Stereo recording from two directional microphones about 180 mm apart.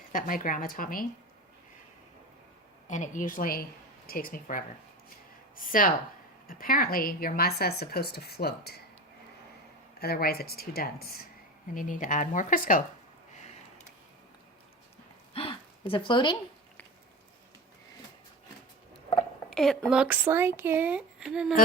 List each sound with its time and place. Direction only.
0.1 s speech: 50° left (ahead or behind)
2.8 s a woman's voice: 45° left (ahead or behind); by 8.8 s 60° left (ahead or behind)
10.0 s a woman's voice: 60° left (ahead or behind)
15.3 s a sound: 30° left (ahead or behind)
19.5 s speech: 5° left (ahead or behind)
20.0 s speech: 10° right (ahead or behind)